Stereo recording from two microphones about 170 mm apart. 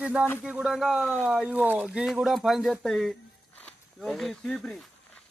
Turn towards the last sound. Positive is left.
turn(degrees=5)  # may be behind; listen again after turning